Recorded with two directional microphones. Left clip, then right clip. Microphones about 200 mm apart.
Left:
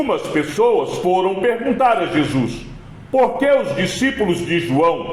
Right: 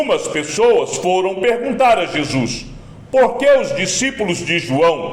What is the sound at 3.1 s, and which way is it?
A man's voice, 25° right (ahead or behind).